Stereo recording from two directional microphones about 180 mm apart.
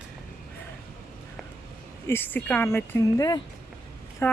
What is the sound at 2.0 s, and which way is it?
Speech, 10° left (ahead or behind).